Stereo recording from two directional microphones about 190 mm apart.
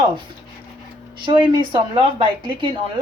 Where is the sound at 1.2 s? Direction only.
25° right (ahead or behind).